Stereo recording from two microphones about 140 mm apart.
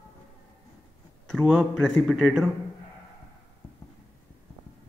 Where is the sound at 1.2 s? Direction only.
Centre (ahead or behind).